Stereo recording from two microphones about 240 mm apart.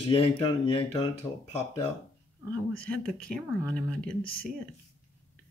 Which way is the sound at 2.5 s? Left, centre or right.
Centre.